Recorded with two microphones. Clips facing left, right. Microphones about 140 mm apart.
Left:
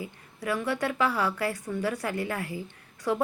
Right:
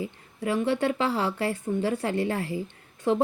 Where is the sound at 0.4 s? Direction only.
25° right (ahead or behind).